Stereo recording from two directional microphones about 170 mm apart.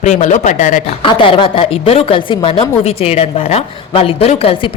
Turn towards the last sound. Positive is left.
turn(degrees=35)  # may be behind; listen again after turning